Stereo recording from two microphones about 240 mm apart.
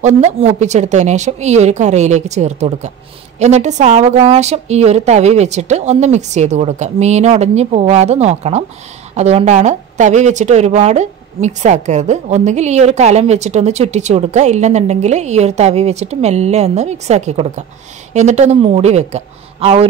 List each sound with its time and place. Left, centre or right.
0.0 s a woman's voice: right